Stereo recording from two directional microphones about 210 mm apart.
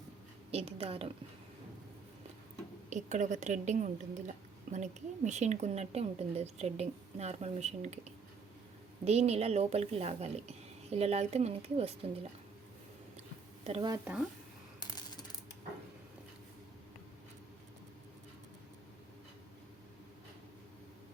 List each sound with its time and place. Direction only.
0.5 s speech: 30° right (ahead or behind)
2.9 s a woman's voice: 35° right (ahead or behind)
9.0 s speech: 30° right (ahead or behind)
13.7 s speech: 25° right (ahead or behind)
13.9 s speech: 5° right (ahead or behind)